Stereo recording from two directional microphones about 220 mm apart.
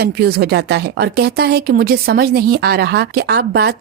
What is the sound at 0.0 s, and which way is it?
Speech, 45° right (ahead or behind).